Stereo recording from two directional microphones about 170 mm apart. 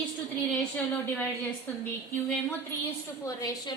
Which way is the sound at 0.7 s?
10° left (ahead or behind).